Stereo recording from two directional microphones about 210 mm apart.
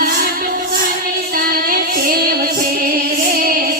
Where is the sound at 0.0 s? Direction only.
45° right (ahead or behind).